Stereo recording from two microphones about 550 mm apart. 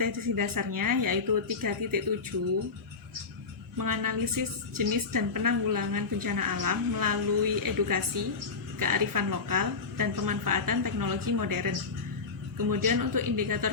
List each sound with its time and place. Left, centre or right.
0.0 s a woman's voice: right
3.8 s a woman's voice: right
12.7 s a woman's voice: right